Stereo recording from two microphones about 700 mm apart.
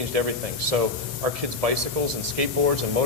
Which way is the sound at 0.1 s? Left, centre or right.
Right.